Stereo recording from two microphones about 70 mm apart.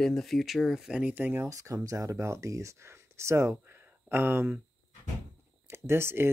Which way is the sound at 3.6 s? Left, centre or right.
Right.